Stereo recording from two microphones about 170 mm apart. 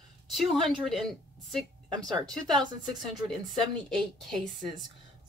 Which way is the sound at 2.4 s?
25° right (ahead or behind).